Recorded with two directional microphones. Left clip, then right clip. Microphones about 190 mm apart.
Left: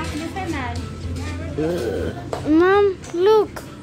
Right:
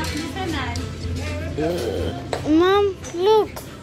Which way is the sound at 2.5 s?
15° left (ahead or behind).